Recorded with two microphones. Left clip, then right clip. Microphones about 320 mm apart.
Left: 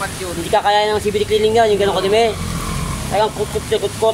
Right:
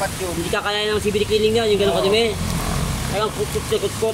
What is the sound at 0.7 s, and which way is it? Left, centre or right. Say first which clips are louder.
Speech: left 5 dB; centre.